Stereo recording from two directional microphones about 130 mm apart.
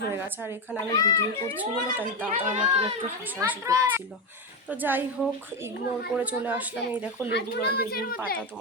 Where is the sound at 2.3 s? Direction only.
70° right (ahead or behind).